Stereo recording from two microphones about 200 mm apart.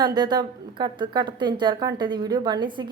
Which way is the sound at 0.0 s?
20° right (ahead or behind).